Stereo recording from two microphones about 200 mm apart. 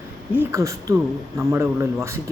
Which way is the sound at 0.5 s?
15° right (ahead or behind).